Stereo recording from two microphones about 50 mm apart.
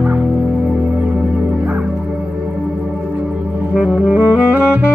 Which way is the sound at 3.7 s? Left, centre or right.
Right.